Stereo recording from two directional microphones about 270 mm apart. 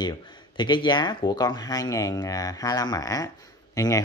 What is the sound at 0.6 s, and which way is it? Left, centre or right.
Speech, centre.